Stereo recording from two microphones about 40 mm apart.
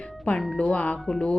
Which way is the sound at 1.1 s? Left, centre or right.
Left.